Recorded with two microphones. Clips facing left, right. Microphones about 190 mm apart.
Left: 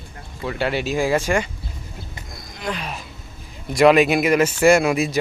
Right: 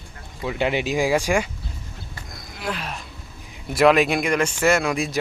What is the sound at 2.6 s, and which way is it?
Speech, centre (ahead or behind).